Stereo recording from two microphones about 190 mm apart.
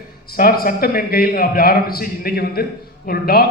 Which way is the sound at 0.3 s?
50° left (ahead or behind).